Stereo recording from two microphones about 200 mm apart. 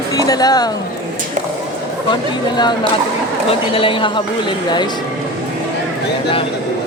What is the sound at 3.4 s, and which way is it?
Speech, 25° left (ahead or behind).